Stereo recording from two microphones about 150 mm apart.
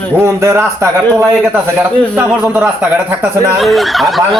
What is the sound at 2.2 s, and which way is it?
Speech, 10° right (ahead or behind).